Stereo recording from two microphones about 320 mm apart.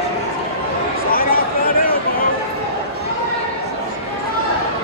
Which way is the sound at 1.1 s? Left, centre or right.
Left.